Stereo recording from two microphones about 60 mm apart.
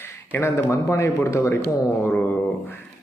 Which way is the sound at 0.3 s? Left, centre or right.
Left.